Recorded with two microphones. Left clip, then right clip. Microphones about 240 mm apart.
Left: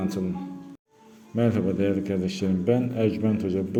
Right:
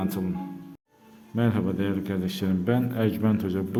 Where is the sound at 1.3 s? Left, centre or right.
Centre.